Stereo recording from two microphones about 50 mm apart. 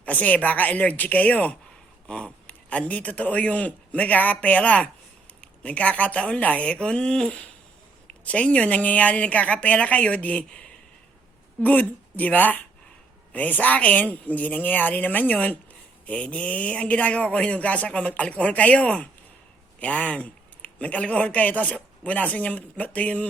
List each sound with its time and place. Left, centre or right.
0.0 s a man's voice: left
11.6 s a man's voice: left